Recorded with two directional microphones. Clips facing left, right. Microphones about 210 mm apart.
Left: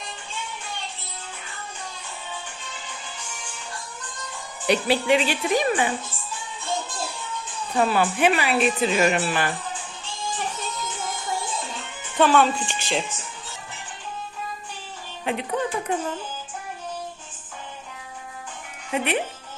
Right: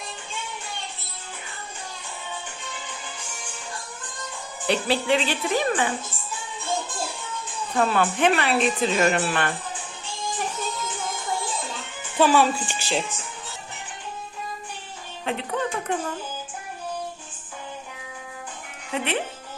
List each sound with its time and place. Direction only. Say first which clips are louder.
4.6 s speech: left 2 dB; 15° left (ahead or behind)
7.8 s speech: left 1 dB; 5° left (ahead or behind)
12.1 s speech: even; 5° right (ahead or behind)
15.3 s speech: left 2 dB; 10° left (ahead or behind)
18.9 s speech: left 2 dB; 15° left (ahead or behind)